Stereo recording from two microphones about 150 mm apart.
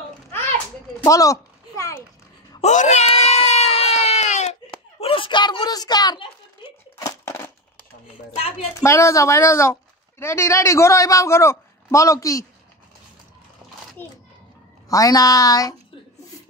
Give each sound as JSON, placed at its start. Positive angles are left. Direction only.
{"t": 1.0, "sound": "speech", "side_deg": 20}
{"t": 2.6, "sound": "a sound", "side_deg": 50}
{"t": 5.0, "sound": "speech", "side_deg": 35}
{"t": 7.0, "sound": "crushing", "side_deg": 20}
{"t": 8.4, "sound": "speech", "side_deg": 45}
{"t": 8.8, "sound": "speech", "side_deg": 20}
{"t": 14.0, "sound": "a child's voice", "side_deg": 15}